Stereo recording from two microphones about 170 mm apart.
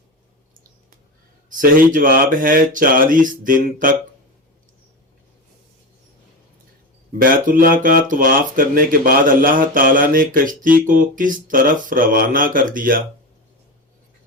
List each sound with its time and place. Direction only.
1.5 s speech: 55° right (ahead or behind)
7.1 s speech: 55° right (ahead or behind)